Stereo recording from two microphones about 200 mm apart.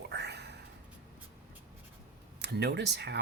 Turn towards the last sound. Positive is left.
turn(degrees=-55)  # may be behind; listen again after turning